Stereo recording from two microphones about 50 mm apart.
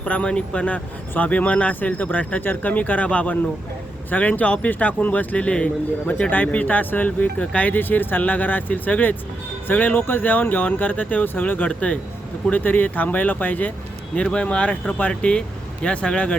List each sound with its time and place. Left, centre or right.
0.0 s a man's voice: left
7.7 s a man's voice: left
11.7 s a man's voice: left
14.2 s speech: left